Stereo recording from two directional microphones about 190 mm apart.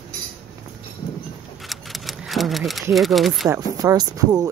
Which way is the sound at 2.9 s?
Centre (ahead or behind).